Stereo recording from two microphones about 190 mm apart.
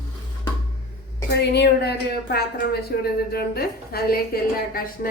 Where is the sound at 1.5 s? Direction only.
60° left (ahead or behind).